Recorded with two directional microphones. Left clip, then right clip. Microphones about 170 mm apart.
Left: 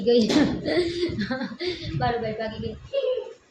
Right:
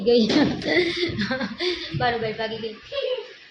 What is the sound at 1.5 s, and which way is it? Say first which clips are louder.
Speech: right 4 dB; 35° right (ahead or behind).